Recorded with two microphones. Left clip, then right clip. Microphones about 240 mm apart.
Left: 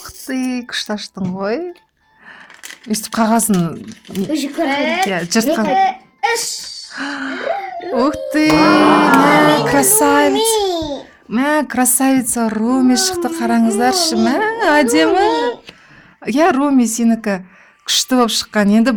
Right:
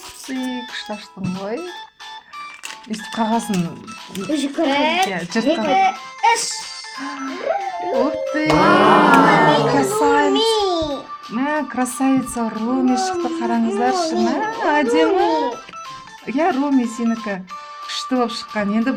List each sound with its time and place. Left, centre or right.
0.3 s speech: left
2.9 s speech: left
4.6 s speech: centre
5.1 s speech: left
5.6 s a child's voice: centre
7.0 s speech: left
8.5 s speech: centre
9.7 s speech: left
10.3 s a child's voice: centre
11.3 s speech: left